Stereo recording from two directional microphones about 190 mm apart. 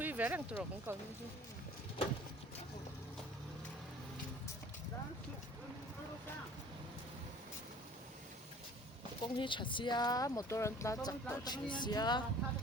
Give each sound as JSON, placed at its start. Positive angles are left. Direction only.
{"t": 0.0, "sound": "speech", "side_deg": -10}
{"t": 9.2, "sound": "speech", "side_deg": 25}